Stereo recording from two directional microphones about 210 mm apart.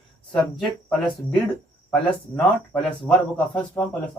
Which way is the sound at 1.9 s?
5° left (ahead or behind).